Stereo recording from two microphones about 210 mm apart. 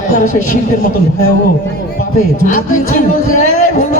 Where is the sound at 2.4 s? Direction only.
35° left (ahead or behind).